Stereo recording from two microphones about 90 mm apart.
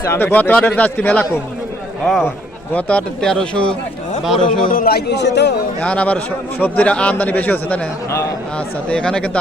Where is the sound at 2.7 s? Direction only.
15° left (ahead or behind).